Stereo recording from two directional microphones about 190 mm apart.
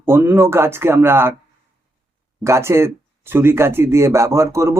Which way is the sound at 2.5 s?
15° right (ahead or behind).